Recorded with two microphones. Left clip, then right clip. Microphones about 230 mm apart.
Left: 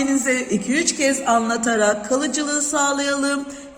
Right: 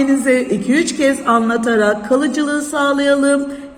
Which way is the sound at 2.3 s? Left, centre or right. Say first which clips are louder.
Right 4 dB; left.